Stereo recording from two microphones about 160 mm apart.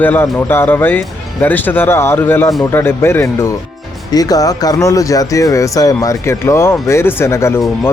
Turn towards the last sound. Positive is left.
turn(degrees=15)  # may be behind; listen again after turning